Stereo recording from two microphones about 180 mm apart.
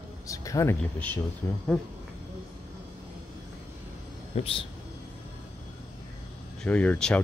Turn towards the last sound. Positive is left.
turn(degrees=5)  # may be behind; listen again after turning